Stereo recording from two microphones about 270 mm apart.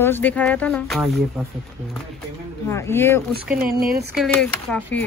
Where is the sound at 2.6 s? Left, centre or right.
Centre.